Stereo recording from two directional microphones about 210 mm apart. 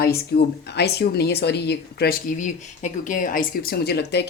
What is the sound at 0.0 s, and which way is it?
Speech, 50° left (ahead or behind).